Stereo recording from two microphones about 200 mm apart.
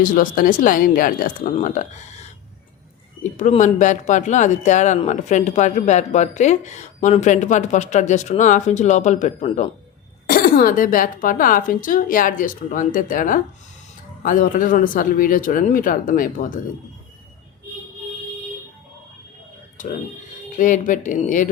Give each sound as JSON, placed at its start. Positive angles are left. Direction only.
{"t": 0.0, "sound": "speech", "side_deg": 40}
{"t": 3.3, "sound": "speech", "side_deg": 35}
{"t": 19.8, "sound": "speech", "side_deg": 40}